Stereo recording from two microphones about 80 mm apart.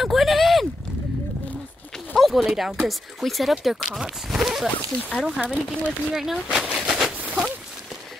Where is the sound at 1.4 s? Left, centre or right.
Centre.